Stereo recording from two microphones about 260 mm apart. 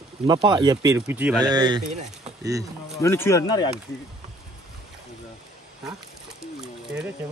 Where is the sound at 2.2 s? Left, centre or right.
Centre.